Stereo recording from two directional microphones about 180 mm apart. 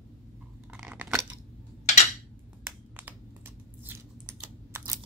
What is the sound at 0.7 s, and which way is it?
Chewing, 5° right (ahead or behind).